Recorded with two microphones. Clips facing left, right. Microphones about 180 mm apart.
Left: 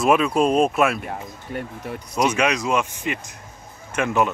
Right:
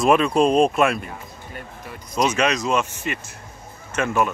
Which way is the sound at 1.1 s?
65° left (ahead or behind).